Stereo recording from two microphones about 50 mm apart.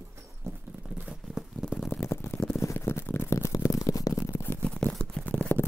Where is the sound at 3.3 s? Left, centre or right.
Left.